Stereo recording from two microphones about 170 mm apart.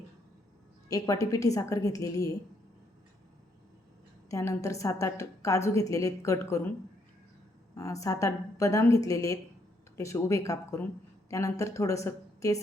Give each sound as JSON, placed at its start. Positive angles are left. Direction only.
{"t": 0.9, "sound": "a woman's voice", "side_deg": 20}
{"t": 4.3, "sound": "a woman's voice", "side_deg": 20}
{"t": 7.8, "sound": "a woman's voice", "side_deg": 20}